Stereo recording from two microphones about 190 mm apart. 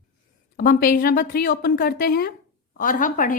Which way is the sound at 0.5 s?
50° left (ahead or behind).